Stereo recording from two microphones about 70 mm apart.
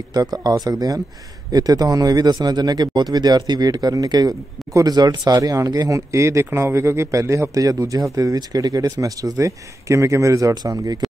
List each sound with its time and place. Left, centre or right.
0.1 s speech: right
10.5 s speech: right